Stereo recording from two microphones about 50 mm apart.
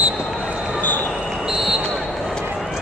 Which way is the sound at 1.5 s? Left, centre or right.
Centre.